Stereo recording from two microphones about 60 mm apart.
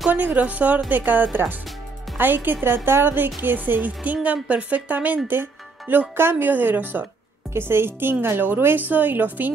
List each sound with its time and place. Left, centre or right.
0.1 s a woman's voice: right